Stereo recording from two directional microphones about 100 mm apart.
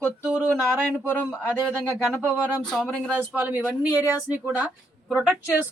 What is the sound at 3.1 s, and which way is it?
A man's voice, 20° right (ahead or behind).